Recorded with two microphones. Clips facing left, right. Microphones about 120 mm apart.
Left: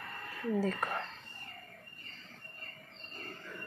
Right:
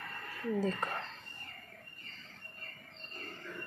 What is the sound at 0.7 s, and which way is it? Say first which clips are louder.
Speech: left 2 dB; 15° left (ahead or behind).